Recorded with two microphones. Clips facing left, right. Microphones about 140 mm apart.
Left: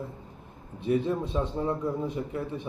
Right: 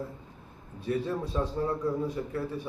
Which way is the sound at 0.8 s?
20° left (ahead or behind).